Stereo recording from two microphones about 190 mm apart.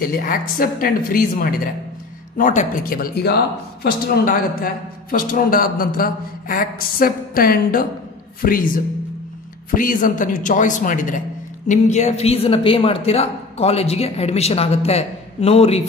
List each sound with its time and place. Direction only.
0.0 s a man's voice: 50° left (ahead or behind); by 15.8 s 35° left (ahead or behind)